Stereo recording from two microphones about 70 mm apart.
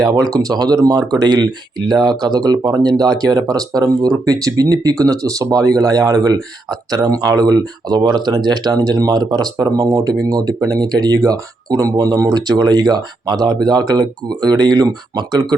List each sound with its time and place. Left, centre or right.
0.0 s speech: right
8.4 s speech: right